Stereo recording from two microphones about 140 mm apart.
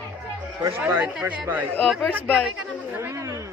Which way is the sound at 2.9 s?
15° right (ahead or behind).